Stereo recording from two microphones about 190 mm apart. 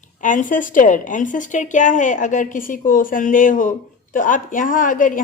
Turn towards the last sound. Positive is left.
turn(degrees=45)  # may be behind; listen again after turning